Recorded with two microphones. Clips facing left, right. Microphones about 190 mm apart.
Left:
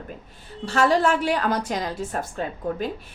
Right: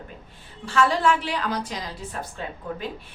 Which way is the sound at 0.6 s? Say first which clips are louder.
Left 2 dB; 40° left (ahead or behind).